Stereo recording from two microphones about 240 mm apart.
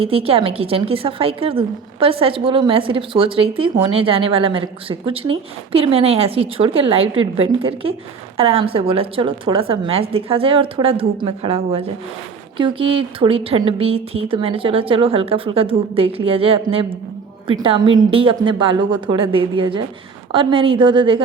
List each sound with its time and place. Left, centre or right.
0.0 s a woman's voice: right